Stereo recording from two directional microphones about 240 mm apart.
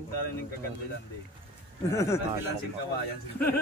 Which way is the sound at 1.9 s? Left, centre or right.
Centre.